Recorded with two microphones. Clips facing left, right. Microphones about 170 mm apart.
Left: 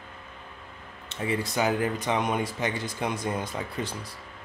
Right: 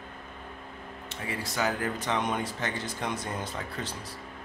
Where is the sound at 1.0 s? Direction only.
20° left (ahead or behind).